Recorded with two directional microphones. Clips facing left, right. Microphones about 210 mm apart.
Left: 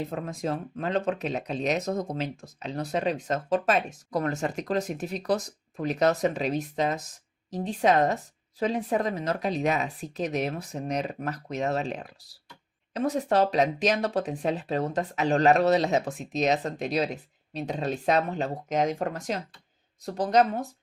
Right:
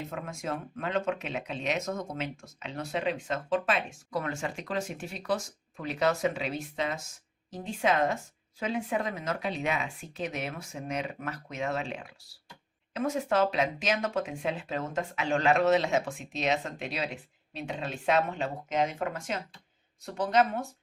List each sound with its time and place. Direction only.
0.0 s speech: 35° left (ahead or behind)